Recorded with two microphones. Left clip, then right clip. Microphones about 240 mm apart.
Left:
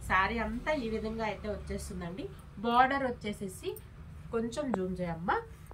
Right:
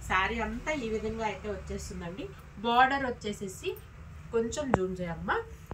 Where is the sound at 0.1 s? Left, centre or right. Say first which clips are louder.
Even; centre.